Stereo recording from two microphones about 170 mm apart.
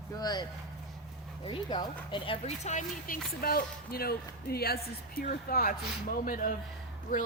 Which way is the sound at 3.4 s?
65° left (ahead or behind).